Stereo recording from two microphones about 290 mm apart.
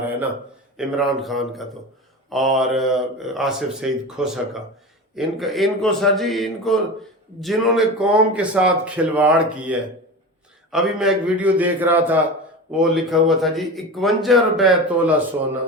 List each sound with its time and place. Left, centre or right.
0.8 s a man's voice: centre